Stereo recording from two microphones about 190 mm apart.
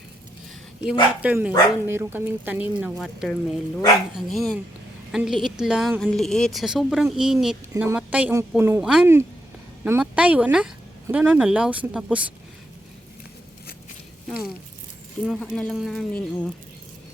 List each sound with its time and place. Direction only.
1.2 s a woman's voice: 10° right (ahead or behind)
14.3 s a woman's voice: centre (ahead or behind)